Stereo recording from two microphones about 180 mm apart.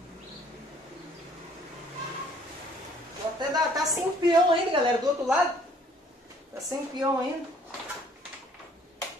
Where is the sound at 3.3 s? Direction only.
20° right (ahead or behind).